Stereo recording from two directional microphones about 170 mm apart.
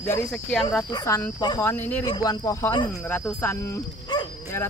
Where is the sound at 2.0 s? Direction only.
25° left (ahead or behind).